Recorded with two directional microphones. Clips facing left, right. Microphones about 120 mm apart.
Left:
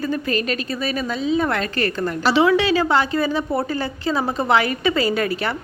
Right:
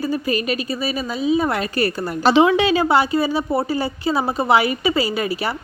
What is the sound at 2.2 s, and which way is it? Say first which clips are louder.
A woman's voice: right 2 dB; 20° right (ahead or behind).